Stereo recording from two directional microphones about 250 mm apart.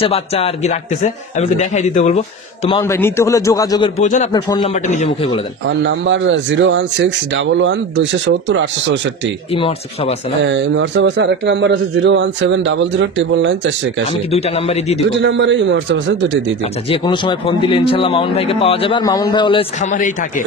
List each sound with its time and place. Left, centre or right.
0.0 s a man's voice: left
2.8 s a man's voice: centre
4.0 s a man's voice: left
4.3 s a man's voice: centre
4.8 s a man's voice: left
5.8 s a man's voice: right
10.4 s a man's voice: right
14.3 s a man's voice: left
15.0 s a man's voice: right
16.9 s a man's voice: centre